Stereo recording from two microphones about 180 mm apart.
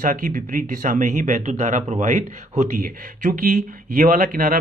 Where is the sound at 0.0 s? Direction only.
50° right (ahead or behind).